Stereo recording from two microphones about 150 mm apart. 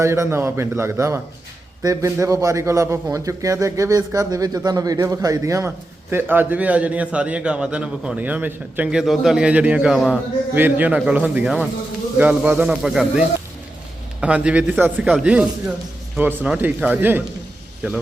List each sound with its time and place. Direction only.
0.0 s a man's voice: 20° right (ahead or behind)